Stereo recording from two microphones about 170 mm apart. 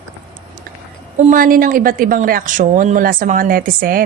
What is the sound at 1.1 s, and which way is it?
A woman's voice, 50° right (ahead or behind).